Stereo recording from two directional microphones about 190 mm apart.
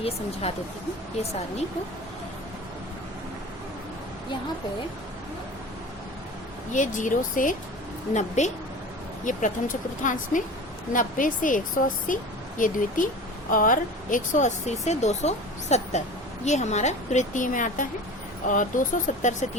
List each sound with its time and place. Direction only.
0.0 s speech: 30° left (ahead or behind)
6.7 s speech: 40° left (ahead or behind)